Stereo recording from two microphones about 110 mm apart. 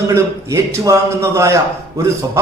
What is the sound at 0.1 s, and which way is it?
A man's voice, 25° right (ahead or behind).